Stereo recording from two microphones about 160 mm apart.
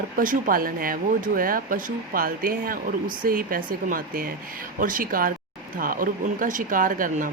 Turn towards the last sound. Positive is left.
turn(degrees=-55)  # may be behind; listen again after turning